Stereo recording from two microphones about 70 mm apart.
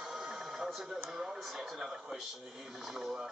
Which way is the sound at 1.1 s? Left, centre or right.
Centre.